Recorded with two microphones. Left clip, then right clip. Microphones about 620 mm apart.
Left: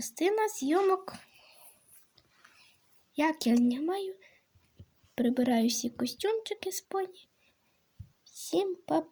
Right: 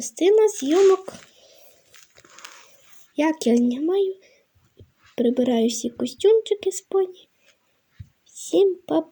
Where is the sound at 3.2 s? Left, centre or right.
Left.